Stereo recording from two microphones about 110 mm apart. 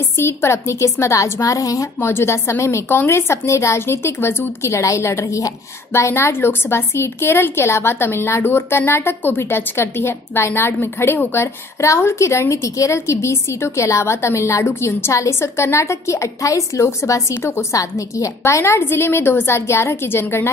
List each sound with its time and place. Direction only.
0.2 s a woman's voice: 25° left (ahead or behind)
2.0 s a woman's voice: 20° left (ahead or behind)